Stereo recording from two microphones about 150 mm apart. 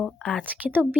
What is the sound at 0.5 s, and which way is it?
Speech, 10° right (ahead or behind).